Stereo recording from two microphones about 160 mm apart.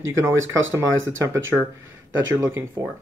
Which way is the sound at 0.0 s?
15° right (ahead or behind).